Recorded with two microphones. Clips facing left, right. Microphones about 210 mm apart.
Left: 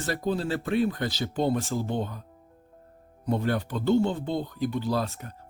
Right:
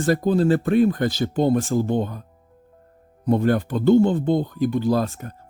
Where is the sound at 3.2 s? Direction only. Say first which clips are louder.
Right 8 dB; 50° right (ahead or behind).